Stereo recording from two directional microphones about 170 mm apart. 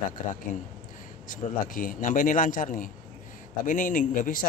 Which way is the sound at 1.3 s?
55° left (ahead or behind).